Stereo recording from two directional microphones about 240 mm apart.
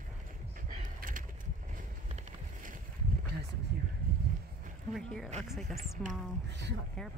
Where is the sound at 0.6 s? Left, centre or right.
Right.